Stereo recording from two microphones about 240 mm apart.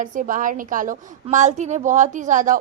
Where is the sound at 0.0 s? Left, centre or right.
Right.